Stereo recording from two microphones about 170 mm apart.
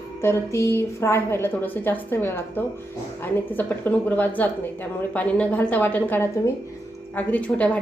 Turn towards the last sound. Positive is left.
turn(degrees=10)  # may be behind; listen again after turning